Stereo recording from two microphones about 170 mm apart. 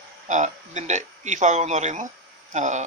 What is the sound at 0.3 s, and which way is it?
Speech, 45° right (ahead or behind).